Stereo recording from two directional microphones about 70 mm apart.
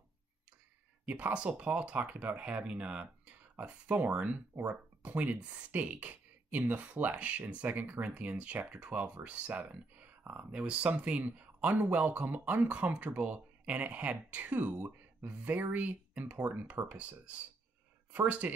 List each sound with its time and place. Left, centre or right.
1.0 s speech: centre